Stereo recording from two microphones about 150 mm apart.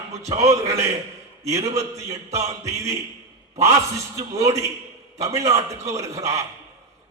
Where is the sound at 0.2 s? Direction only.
20° right (ahead or behind).